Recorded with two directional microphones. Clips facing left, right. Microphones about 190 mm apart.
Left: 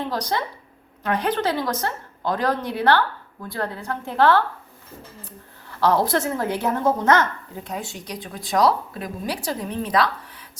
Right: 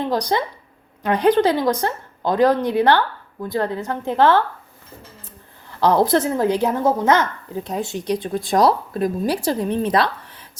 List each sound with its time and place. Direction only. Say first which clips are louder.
0.1 s a woman's voice: right 5 dB; 15° right (ahead or behind)
5.8 s speech: right 4 dB; 15° right (ahead or behind)
7.8 s a woman's voice: right 10 dB; 25° right (ahead or behind)
8.4 s speech: right 2 dB; 50° right (ahead or behind)
9.4 s a woman's voice: right 7 dB; 25° right (ahead or behind)